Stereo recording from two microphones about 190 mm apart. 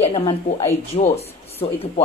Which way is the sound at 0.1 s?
30° left (ahead or behind).